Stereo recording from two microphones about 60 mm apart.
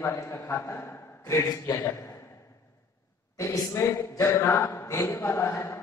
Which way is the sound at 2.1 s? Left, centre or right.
Left.